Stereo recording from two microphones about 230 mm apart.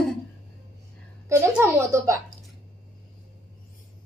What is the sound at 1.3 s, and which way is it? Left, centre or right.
Speech, centre.